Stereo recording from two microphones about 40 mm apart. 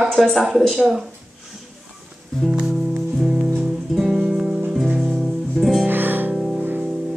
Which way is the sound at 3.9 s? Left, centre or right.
Centre.